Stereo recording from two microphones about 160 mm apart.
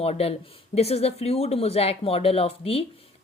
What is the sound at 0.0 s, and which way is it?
A woman's voice, 40° left (ahead or behind).